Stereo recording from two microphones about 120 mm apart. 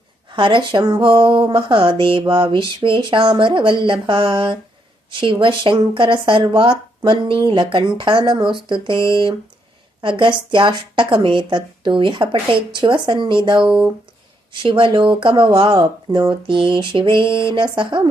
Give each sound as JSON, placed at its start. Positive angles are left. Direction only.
{"t": 0.3, "sound": "speech", "side_deg": -45}